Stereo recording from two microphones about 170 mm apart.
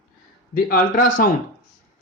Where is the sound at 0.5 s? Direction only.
55° left (ahead or behind).